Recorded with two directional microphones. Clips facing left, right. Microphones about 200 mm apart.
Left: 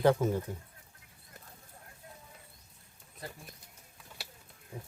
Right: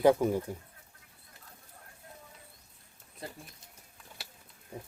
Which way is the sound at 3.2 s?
25° right (ahead or behind).